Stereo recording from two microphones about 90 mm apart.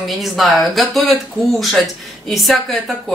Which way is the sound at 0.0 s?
Centre (ahead or behind).